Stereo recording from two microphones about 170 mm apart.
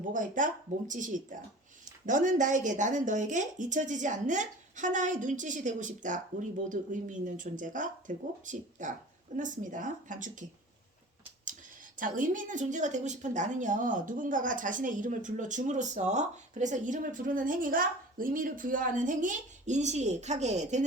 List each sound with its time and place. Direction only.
0.0 s a woman's voice: 50° right (ahead or behind)
11.9 s a woman's voice: 50° right (ahead or behind)